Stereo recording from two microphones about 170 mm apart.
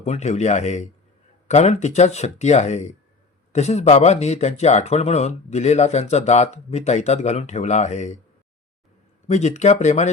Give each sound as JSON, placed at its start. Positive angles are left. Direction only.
{"t": 0.0, "sound": "speech", "side_deg": 40}
{"t": 9.2, "sound": "speech", "side_deg": 40}